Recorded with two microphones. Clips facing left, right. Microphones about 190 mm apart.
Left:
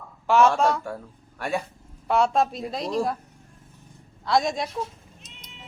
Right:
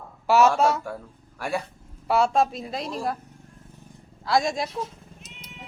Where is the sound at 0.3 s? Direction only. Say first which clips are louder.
Even; 5° right (ahead or behind).